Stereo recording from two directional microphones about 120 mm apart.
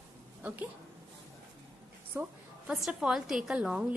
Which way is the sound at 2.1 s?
20° right (ahead or behind).